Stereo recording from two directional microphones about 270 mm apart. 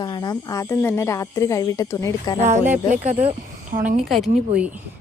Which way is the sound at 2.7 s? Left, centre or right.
Right.